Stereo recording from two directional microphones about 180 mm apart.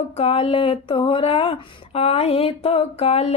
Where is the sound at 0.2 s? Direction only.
30° left (ahead or behind).